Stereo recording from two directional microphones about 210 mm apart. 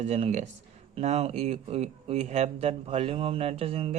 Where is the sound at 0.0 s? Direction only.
30° right (ahead or behind).